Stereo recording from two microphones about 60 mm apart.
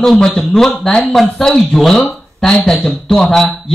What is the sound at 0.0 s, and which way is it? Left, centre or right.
A man's voice, centre.